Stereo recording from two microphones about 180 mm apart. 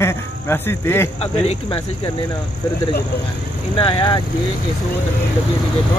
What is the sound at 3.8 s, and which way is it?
Speech, 25° left (ahead or behind).